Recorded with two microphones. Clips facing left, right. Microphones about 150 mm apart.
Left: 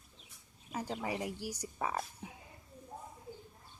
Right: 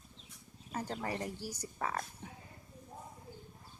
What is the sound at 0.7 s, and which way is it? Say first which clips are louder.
A woman's voice: left 1 dB; 5° left (ahead or behind).